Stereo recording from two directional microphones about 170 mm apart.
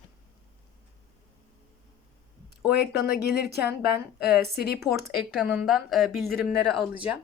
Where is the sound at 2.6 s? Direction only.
65° left (ahead or behind).